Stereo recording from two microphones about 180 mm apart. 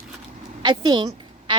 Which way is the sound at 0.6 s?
25° right (ahead or behind).